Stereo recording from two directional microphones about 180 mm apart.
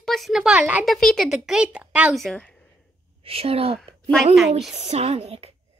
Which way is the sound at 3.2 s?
30° right (ahead or behind).